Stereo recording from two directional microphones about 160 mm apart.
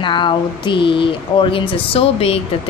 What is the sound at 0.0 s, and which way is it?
Speech, 30° left (ahead or behind).